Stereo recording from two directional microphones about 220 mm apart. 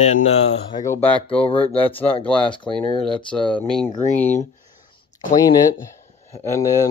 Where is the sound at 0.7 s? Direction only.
15° left (ahead or behind).